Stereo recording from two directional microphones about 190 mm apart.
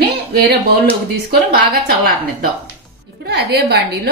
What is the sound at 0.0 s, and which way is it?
A woman's voice, 55° right (ahead or behind).